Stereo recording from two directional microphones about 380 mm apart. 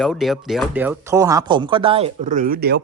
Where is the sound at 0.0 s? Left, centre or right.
Centre.